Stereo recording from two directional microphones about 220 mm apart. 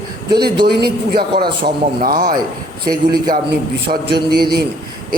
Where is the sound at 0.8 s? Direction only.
45° right (ahead or behind).